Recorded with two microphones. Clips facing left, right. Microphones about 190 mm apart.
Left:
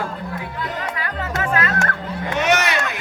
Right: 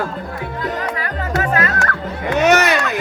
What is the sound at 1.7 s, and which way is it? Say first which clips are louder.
Music: right 1 dB; 25° left (ahead or behind).